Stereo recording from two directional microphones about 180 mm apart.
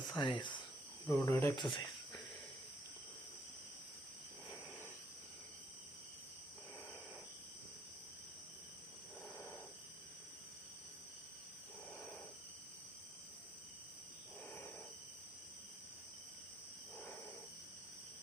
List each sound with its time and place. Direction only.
0.2 s speech: 25° left (ahead or behind)
1.0 s speech: 10° left (ahead or behind)